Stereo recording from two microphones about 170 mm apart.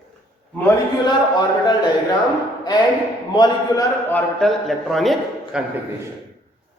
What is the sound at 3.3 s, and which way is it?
Speech, 25° left (ahead or behind).